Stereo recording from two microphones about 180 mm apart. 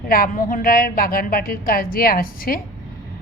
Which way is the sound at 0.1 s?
50° left (ahead or behind).